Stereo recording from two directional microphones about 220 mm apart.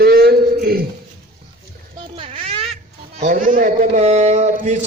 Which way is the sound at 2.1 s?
25° right (ahead or behind).